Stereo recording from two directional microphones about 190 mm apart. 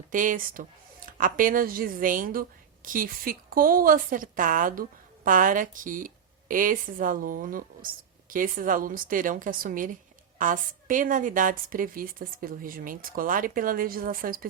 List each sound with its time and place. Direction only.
0.1 s a woman's voice: 45° right (ahead or behind)